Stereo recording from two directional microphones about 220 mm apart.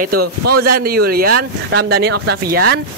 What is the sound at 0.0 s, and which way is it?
Speech, 45° right (ahead or behind).